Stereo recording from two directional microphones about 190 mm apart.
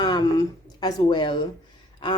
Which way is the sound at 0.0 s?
20° left (ahead or behind).